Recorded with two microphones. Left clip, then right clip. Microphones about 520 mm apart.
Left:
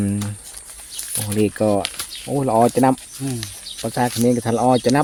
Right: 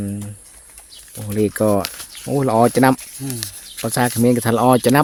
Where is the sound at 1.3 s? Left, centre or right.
Right.